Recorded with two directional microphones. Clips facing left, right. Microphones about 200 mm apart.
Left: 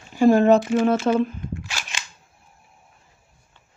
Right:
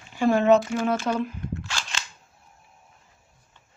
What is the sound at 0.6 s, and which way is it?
Cap gun, 25° left (ahead or behind).